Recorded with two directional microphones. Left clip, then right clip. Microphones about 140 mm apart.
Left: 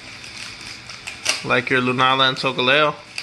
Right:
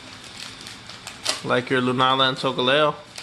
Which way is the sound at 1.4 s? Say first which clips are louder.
Left 3 dB; centre (ahead or behind).